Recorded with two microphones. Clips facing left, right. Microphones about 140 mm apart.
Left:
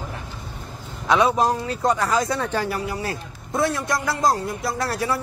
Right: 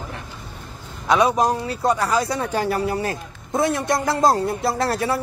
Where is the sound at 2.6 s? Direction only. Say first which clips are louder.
Right 5 dB; 30° right (ahead or behind).